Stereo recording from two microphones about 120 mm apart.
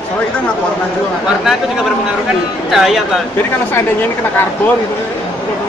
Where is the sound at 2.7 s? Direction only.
5° right (ahead or behind).